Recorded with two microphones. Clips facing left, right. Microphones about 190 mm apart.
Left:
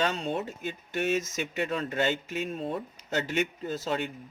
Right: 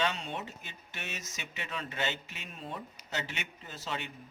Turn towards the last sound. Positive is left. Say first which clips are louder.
# left 9 dB
turn(degrees=45)  # may be behind; listen again after turning